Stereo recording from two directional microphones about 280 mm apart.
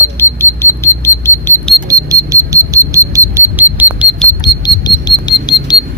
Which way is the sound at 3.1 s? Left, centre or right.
Centre.